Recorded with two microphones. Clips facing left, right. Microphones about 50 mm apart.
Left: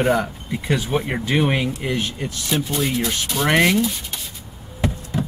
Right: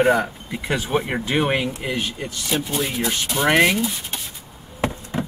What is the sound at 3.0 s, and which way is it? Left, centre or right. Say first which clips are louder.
Speech: right 1 dB; centre.